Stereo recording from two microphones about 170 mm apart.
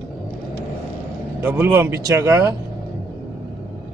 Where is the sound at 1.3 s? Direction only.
15° right (ahead or behind).